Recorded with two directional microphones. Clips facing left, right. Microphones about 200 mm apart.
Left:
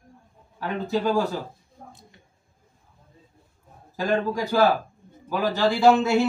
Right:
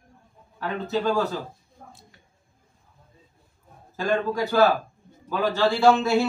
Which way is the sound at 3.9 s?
15° left (ahead or behind).